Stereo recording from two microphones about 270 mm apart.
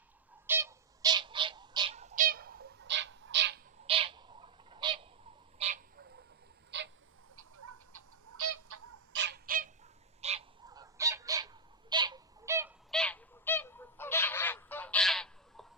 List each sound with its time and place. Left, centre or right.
0.4 s bird: centre; by 3.6 s right
3.8 s owl: centre
6.7 s a sound: right
7.3 s fowl: right
9.1 s bird: right
10.2 s fowl: right
12.9 s goose: centre